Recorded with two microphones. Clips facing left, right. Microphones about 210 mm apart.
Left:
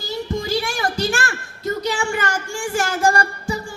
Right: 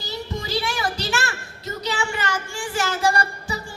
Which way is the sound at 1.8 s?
50° left (ahead or behind).